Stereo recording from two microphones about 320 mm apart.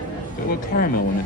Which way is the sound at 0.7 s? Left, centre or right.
Left.